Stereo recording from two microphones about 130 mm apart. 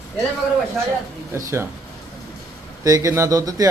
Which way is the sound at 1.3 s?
20° right (ahead or behind).